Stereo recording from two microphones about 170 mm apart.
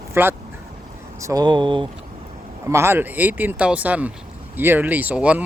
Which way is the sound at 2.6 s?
15° right (ahead or behind).